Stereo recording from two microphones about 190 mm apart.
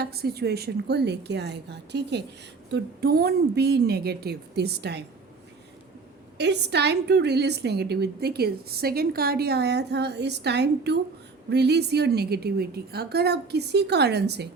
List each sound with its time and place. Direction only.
0.0 s a woman's voice: 55° right (ahead or behind)
6.3 s a woman's voice: 65° right (ahead or behind)